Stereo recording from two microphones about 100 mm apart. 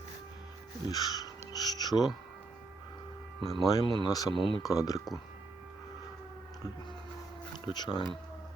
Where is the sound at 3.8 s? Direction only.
50° left (ahead or behind).